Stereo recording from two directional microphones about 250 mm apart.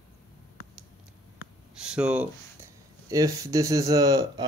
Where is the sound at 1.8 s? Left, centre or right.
Centre.